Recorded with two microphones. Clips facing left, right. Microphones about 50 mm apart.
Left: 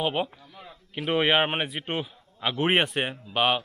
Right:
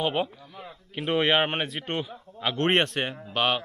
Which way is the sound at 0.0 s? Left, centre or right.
Centre.